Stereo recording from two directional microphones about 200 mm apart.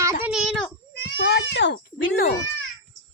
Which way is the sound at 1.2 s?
55° left (ahead or behind).